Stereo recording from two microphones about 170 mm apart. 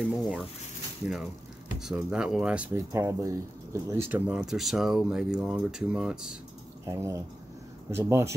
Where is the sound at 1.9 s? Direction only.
5° right (ahead or behind).